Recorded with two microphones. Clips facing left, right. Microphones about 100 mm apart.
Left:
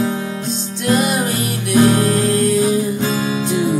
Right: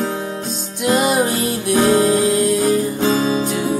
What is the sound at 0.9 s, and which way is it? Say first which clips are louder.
Music: right 1 dB; 25° right (ahead or behind).